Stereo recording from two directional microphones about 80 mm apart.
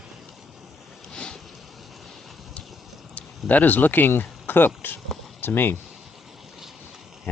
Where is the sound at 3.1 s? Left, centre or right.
Centre.